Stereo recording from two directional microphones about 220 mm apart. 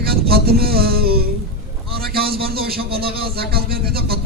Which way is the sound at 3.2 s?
45° right (ahead or behind).